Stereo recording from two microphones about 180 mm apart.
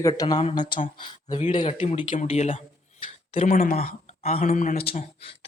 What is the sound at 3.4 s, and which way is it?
Speech, 50° left (ahead or behind).